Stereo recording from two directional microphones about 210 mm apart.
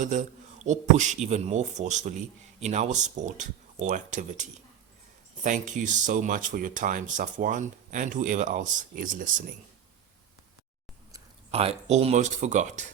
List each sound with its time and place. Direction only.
0.0 s speech: 35° right (ahead or behind)
11.5 s speech: 30° right (ahead or behind)